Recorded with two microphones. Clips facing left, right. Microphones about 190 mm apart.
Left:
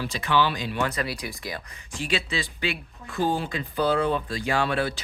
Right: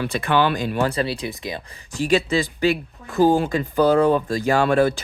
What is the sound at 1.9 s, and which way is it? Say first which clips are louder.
Speech: right 9 dB; 40° right (ahead or behind).